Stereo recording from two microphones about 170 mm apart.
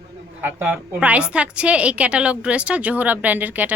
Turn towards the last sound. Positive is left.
turn(degrees=-10)  # may be behind; listen again after turning